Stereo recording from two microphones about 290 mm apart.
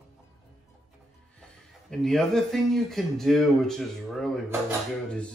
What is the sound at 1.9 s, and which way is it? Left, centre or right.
Speech, centre.